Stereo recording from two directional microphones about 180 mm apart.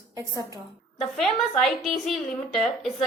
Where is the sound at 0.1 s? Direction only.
20° right (ahead or behind).